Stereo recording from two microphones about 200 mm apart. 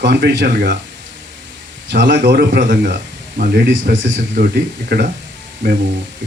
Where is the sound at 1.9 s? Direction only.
60° right (ahead or behind).